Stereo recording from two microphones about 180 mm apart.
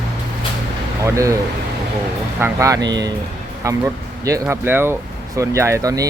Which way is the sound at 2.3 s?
15° right (ahead or behind).